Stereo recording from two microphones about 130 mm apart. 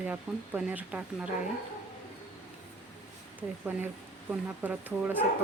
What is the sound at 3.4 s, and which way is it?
Speech, 10° right (ahead or behind).